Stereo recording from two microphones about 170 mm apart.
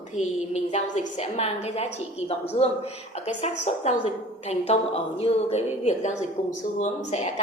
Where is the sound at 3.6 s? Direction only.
40° left (ahead or behind).